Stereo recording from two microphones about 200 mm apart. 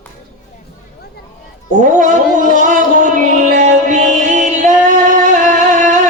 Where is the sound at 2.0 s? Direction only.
40° right (ahead or behind).